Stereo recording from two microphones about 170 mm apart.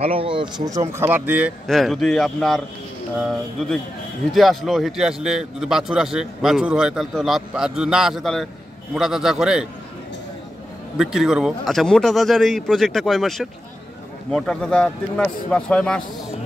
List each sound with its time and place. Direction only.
0.0 s speech: 35° right (ahead or behind); by 1.5 s 10° right (ahead or behind)
1.7 s a man's voice: centre (ahead or behind)
11.0 s a man's voice: 5° right (ahead or behind)